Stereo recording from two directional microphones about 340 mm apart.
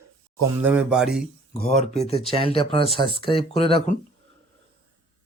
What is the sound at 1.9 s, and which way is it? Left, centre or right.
Speech, centre.